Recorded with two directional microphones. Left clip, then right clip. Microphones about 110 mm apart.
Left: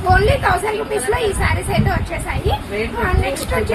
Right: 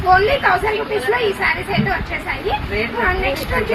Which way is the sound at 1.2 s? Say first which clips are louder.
Right 2 dB; 20° left (ahead or behind).